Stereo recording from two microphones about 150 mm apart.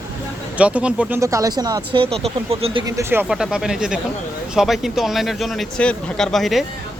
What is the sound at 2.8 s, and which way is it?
Speech, 15° right (ahead or behind).